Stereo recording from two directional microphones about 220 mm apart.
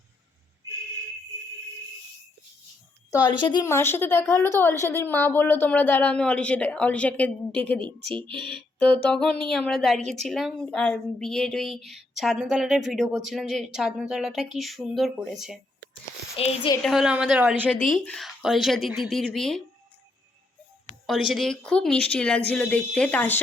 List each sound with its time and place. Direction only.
3.4 s a woman's voice: 15° left (ahead or behind); by 15.5 s centre (ahead or behind)
16.3 s a woman's voice: 25° left (ahead or behind)
16.8 s speech: centre (ahead or behind)
21.1 s speech: centre (ahead or behind)